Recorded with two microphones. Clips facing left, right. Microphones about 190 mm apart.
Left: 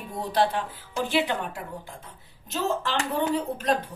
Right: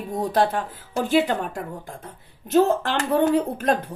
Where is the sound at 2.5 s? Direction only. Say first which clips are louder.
Right 9 dB; 55° right (ahead or behind).